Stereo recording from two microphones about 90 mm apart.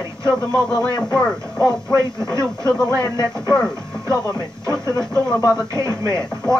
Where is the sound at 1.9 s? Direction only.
35° right (ahead or behind).